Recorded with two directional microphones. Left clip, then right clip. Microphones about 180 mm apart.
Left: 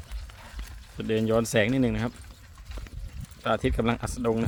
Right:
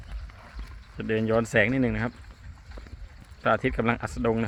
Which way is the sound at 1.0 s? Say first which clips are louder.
Even; 20° left (ahead or behind).